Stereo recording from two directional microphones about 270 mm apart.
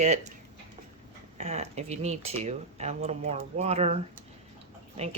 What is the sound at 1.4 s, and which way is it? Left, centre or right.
Speech, right.